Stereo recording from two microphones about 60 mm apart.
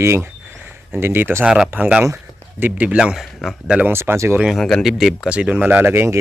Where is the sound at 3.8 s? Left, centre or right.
Right.